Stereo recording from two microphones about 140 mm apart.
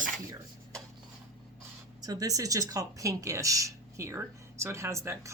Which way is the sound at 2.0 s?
25° right (ahead or behind).